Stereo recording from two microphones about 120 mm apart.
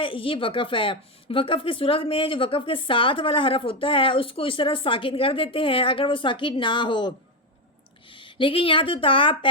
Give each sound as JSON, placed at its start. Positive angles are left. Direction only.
{"t": 0.0, "sound": "a woman's voice", "side_deg": 45}
{"t": 8.1, "sound": "speech", "side_deg": 45}